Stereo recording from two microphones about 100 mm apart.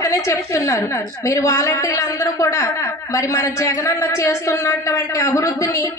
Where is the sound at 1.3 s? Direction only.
30° left (ahead or behind).